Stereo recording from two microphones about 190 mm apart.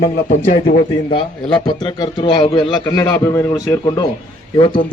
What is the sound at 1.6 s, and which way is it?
A man's voice, 20° left (ahead or behind).